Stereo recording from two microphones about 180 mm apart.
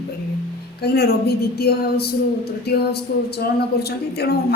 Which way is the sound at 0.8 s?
60° left (ahead or behind).